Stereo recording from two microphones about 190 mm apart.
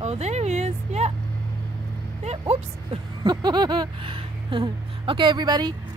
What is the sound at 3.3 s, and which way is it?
Speech, 20° right (ahead or behind).